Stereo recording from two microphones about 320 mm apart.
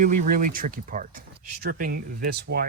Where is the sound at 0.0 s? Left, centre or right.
Right.